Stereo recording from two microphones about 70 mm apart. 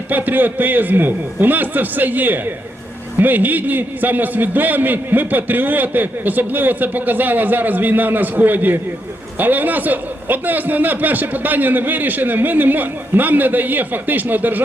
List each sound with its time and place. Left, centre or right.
0.1 s a man's voice: right